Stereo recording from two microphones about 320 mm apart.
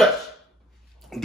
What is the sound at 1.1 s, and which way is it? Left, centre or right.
Speech, centre.